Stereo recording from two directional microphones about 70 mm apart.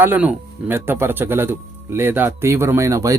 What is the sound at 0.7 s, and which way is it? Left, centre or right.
A man's voice, right.